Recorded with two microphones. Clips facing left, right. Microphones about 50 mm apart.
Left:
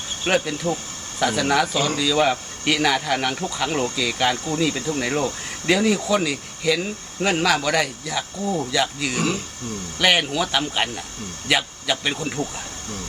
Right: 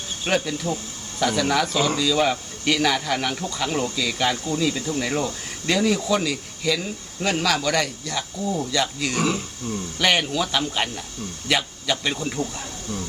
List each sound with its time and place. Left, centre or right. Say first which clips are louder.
0.3 s speech: left 2 dB; centre